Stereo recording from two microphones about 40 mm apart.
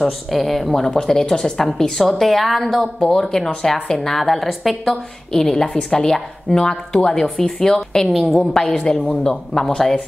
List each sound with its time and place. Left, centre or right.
0.0 s a woman's voice: centre
1.0 s a woman's voice: centre
1.6 s a woman's voice: centre
3.0 s a woman's voice: centre
8.1 s a woman's voice: centre
8.5 s a woman's voice: centre